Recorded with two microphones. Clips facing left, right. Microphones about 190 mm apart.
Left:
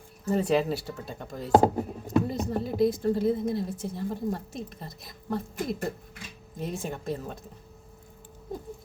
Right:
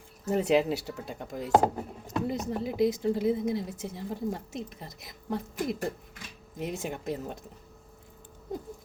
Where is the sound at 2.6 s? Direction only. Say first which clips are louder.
Left 1 dB; 15° right (ahead or behind).